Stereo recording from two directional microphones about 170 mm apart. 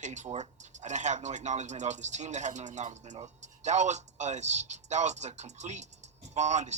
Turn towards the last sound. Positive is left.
turn(degrees=-45)  # may be behind; listen again after turning